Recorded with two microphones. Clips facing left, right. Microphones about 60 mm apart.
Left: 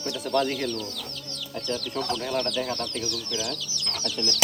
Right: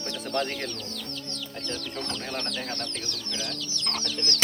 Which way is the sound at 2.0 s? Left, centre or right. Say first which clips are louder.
Left 6 dB; right.